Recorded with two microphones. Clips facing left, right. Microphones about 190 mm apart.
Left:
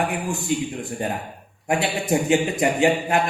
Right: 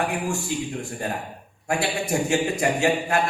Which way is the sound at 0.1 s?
20° left (ahead or behind).